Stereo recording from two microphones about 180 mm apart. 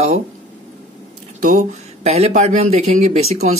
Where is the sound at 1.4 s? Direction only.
40° right (ahead or behind).